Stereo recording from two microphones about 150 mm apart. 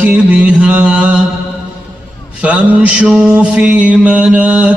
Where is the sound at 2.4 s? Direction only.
10° right (ahead or behind).